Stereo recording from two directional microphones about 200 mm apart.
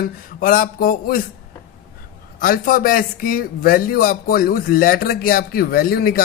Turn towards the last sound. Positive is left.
turn(degrees=45)  # may be behind; listen again after turning